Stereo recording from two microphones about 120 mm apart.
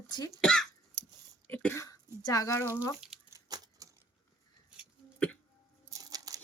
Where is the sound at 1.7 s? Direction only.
30° left (ahead or behind).